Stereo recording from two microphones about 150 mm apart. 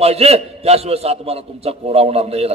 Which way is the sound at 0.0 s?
45° right (ahead or behind).